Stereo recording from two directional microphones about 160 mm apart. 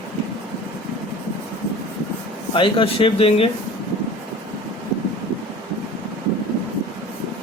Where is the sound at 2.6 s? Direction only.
30° left (ahead or behind).